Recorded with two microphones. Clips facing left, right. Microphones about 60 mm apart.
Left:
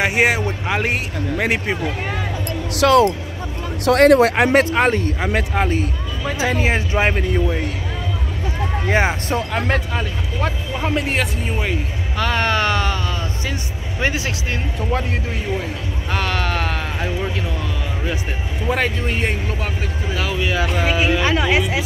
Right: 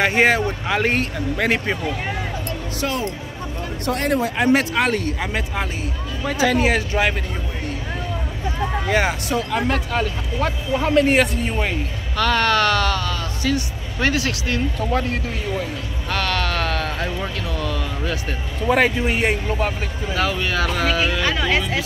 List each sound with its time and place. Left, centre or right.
0.0 s speech: centre
2.8 s speech: left
4.5 s speech: left
5.3 s speech: left
6.6 s speech: left
8.8 s speech: left
10.4 s speech: left
10.8 s speech: centre
12.2 s speech: centre
16.1 s sheep: centre
17.5 s speech: centre
18.7 s speech: centre